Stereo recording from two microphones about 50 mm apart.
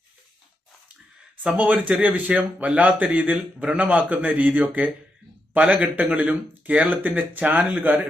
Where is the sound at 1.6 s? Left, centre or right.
Right.